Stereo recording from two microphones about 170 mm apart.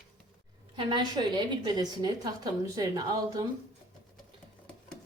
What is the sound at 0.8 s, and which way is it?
A woman's voice, 25° right (ahead or behind).